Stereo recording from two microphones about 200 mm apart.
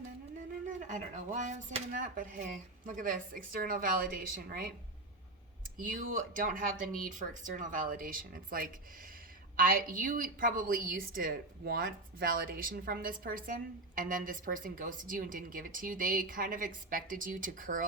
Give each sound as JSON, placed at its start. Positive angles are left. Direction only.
{"t": 0.7, "sound": "a woman's voice", "side_deg": -40}
{"t": 5.7, "sound": "a woman's voice", "side_deg": -45}